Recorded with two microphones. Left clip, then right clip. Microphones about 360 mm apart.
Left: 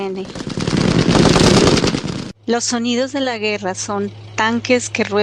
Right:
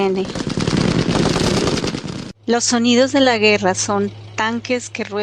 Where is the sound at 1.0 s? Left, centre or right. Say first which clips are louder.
Left 9 dB; left.